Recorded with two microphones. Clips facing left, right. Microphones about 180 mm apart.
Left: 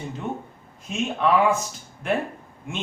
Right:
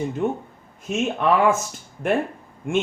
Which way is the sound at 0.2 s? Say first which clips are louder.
Right 6 dB; 50° right (ahead or behind).